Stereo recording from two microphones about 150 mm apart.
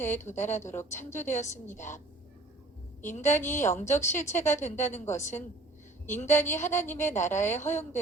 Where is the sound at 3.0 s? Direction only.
55° left (ahead or behind).